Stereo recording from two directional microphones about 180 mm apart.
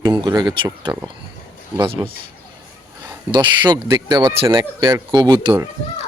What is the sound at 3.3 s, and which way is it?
Speech, 25° right (ahead or behind).